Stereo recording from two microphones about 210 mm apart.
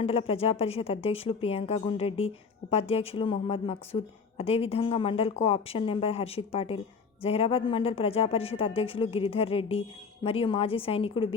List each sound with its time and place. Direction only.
0.0 s a woman's voice: 30° left (ahead or behind)